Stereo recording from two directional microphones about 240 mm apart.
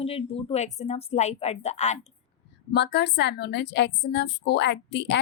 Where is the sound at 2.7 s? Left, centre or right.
Left.